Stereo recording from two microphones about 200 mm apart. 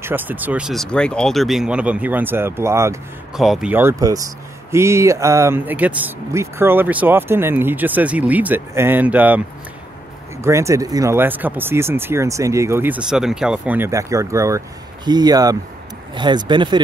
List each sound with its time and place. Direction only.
0.0 s speech: 10° right (ahead or behind)
3.3 s speech: centre (ahead or behind)
10.4 s speech: 15° right (ahead or behind)